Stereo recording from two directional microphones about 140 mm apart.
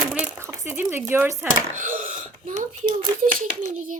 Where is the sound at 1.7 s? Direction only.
65° right (ahead or behind).